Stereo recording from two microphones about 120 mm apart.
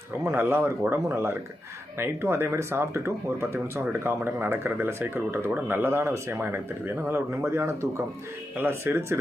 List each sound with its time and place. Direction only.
0.3 s speech: 20° right (ahead or behind)